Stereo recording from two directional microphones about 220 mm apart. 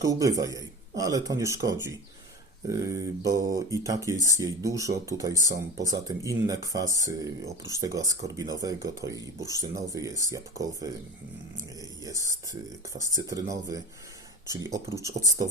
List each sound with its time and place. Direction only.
0.0 s speech: 15° right (ahead or behind)